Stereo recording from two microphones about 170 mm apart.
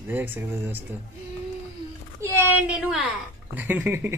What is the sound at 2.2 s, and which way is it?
A man's voice, 15° right (ahead or behind).